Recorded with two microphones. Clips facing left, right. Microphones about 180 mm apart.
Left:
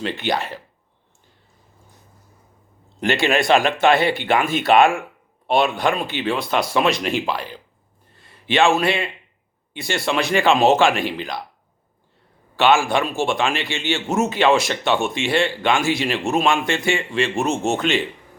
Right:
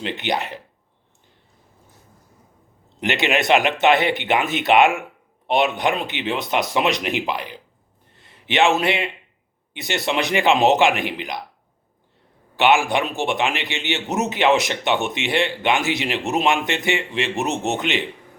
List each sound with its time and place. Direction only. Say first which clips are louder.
0.0 s a man's voice: left 1 dB; 20° right (ahead or behind)
3.0 s a man's voice: left 2 dB; 20° right (ahead or behind)
8.1 s a sound: left 2 dB; 20° right (ahead or behind)
9.7 s a man's voice: left 1 dB; 20° right (ahead or behind)
12.5 s a man's voice: left 1 dB; 20° right (ahead or behind)